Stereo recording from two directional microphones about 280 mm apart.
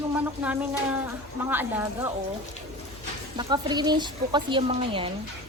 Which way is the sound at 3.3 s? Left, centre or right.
Centre.